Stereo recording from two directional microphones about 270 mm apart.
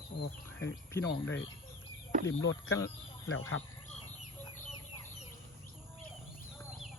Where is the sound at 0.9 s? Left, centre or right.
Centre.